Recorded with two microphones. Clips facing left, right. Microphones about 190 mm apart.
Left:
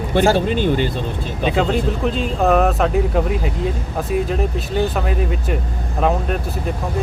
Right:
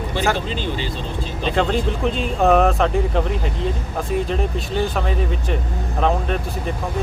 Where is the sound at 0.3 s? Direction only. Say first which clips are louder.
Left 8 dB; 55° left (ahead or behind).